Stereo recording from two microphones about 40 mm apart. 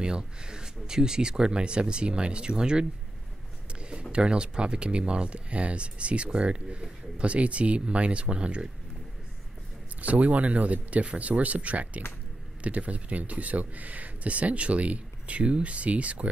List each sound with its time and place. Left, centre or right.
0.0 s speech: right
4.1 s speech: right
10.0 s speech: right